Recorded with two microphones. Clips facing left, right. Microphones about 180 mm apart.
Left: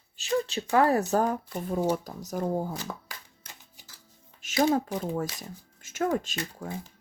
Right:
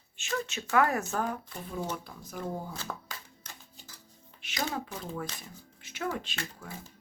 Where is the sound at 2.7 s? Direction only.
15° left (ahead or behind).